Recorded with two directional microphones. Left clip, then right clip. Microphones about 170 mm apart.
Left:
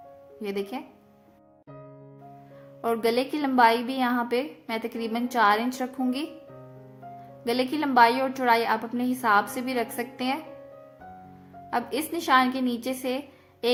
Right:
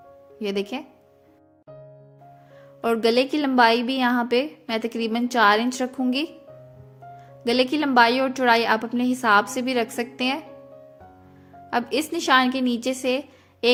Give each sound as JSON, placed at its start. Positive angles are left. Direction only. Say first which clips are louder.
{"t": 0.4, "sound": "speech", "louder": "right 4 dB", "side_deg": -30}
{"t": 2.8, "sound": "a woman's voice", "louder": "right 5 dB", "side_deg": -30}
{"t": 7.4, "sound": "a woman's voice", "louder": "right 5 dB", "side_deg": -30}
{"t": 11.7, "sound": "a woman's voice", "louder": "right 4 dB", "side_deg": -30}